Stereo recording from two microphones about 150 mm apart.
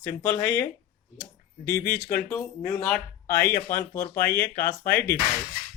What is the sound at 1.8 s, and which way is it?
Speech, 80° left.